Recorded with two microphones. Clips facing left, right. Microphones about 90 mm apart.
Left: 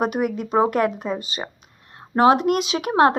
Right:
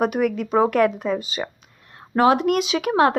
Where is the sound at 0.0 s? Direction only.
20° left (ahead or behind).